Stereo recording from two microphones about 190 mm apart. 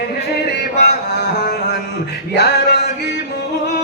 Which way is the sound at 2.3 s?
60° left (ahead or behind).